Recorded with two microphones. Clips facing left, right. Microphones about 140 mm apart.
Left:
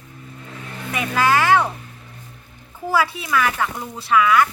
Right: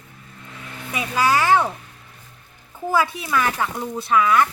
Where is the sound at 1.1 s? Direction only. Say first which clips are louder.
Left 1 dB; 15° right (ahead or behind).